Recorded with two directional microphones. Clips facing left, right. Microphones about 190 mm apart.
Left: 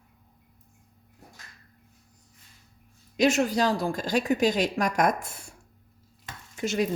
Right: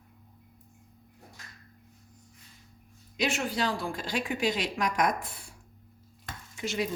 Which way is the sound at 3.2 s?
45° left (ahead or behind).